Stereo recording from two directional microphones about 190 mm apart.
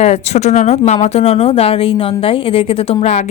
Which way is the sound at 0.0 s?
35° left (ahead or behind).